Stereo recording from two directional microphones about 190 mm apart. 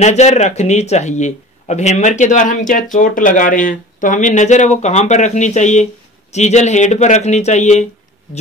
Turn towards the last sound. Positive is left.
turn(degrees=35)  # may be behind; listen again after turning